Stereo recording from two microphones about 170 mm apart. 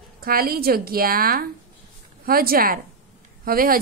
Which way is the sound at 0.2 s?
60° right (ahead or behind).